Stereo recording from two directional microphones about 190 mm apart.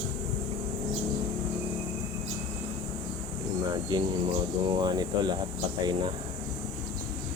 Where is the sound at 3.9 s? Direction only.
20° right (ahead or behind).